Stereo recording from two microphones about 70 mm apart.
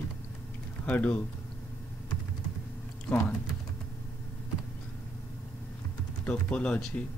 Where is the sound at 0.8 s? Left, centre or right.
Left.